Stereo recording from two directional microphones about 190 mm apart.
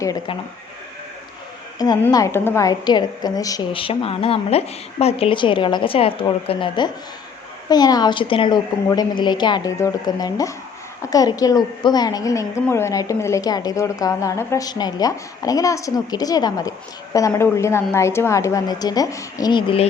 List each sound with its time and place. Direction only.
0.0 s a woman's voice: 20° left (ahead or behind)
1.8 s a woman's voice: 20° left (ahead or behind)